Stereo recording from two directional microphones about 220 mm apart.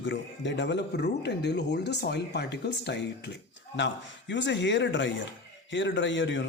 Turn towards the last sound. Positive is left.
turn(degrees=55)  # may be behind; listen again after turning